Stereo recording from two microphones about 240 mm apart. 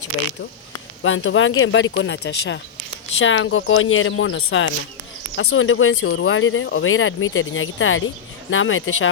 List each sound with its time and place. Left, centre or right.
1.0 s speech: left